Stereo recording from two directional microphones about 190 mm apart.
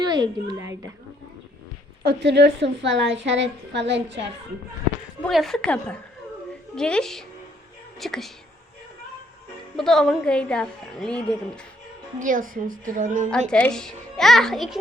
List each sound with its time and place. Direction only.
0.0 s a woman's voice: 20° right (ahead or behind)
2.0 s a woman's voice: 60° right (ahead or behind)
5.2 s a woman's voice: centre (ahead or behind)
9.7 s a woman's voice: centre (ahead or behind)
12.2 s a woman's voice: 45° right (ahead or behind)
13.5 s a woman's voice: 5° left (ahead or behind)